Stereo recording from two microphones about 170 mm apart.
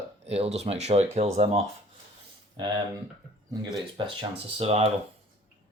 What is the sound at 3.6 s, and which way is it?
Speech, 25° right (ahead or behind).